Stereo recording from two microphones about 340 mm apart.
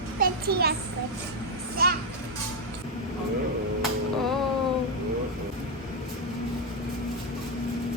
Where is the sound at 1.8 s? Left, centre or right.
Right.